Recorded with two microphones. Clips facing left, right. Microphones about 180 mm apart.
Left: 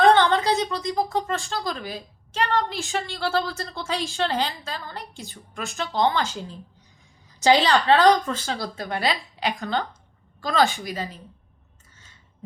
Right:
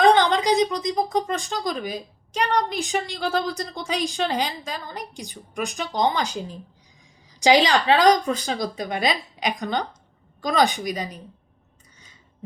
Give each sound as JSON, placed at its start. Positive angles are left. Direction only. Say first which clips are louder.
{"t": 0.0, "sound": "speech", "louder": "even", "side_deg": -15}